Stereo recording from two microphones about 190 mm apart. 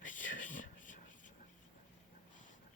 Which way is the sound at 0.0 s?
45° left (ahead or behind).